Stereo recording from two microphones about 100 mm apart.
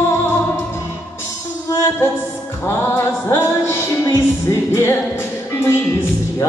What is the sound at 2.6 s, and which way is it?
Music, 25° left (ahead or behind).